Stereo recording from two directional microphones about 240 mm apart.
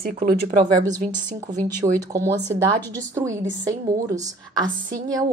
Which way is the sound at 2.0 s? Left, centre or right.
Centre.